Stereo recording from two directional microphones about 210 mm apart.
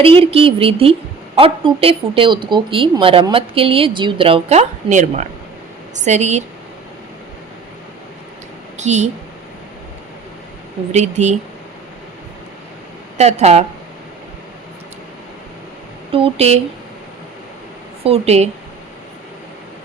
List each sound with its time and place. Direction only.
0.0 s speech: 25° right (ahead or behind)
8.8 s a woman's voice: 35° right (ahead or behind)
10.9 s speech: 35° right (ahead or behind)
13.1 s speech: 30° right (ahead or behind)
16.1 s speech: 30° right (ahead or behind)
18.0 s speech: 30° right (ahead or behind)